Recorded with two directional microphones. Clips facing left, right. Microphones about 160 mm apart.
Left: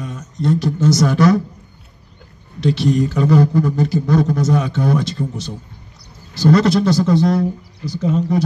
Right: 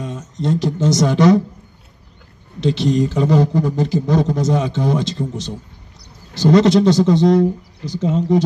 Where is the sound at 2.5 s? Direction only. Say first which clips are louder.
Even; 20° right (ahead or behind).